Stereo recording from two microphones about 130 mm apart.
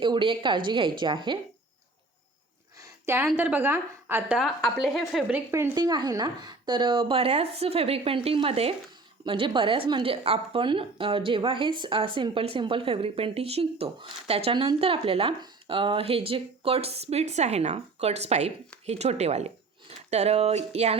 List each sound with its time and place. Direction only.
0.0 s speech: 40° right (ahead or behind)
3.3 s a woman's voice: 15° right (ahead or behind)
4.4 s a woman's voice: centre (ahead or behind)
5.3 s a woman's voice: 20° right (ahead or behind); by 21.0 s 55° right (ahead or behind)